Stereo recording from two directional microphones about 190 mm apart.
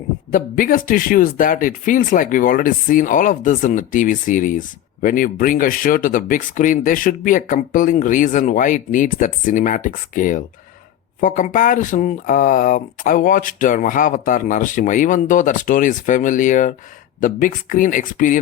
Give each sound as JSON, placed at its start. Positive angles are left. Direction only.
{"t": 0.3, "sound": "speech", "side_deg": 45}